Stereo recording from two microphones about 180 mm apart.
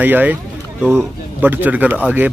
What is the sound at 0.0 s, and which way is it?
Speech, 10° right (ahead or behind).